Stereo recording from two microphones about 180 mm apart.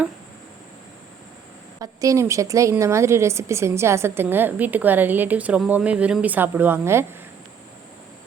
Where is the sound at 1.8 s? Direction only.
20° right (ahead or behind).